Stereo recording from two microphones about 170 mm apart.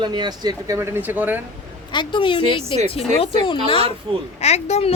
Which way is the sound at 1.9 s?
30° left (ahead or behind).